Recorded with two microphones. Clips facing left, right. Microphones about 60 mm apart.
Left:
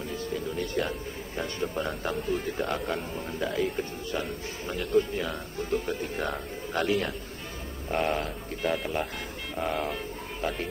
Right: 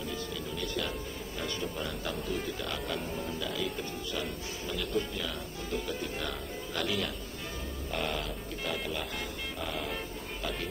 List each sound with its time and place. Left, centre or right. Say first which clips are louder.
0.1 s music: left 5 dB; left
1.4 s speech: left 5 dB; left
9.6 s vehicle: left 8 dB; left